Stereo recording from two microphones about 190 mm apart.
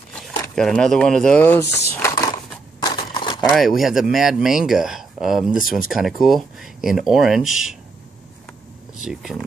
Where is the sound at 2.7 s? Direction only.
25° left (ahead or behind).